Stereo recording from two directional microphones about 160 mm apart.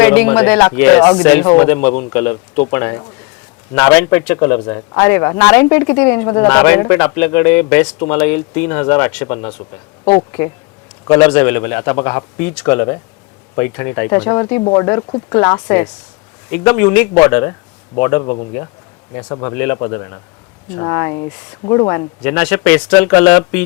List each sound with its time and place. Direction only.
0.0 s speech: 10° left (ahead or behind)
10.0 s speech: 30° left (ahead or behind)
11.0 s speech: 15° left (ahead or behind)